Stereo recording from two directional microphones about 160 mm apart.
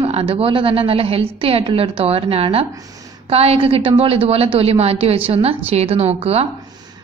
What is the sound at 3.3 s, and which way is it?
A woman's voice, 40° right (ahead or behind).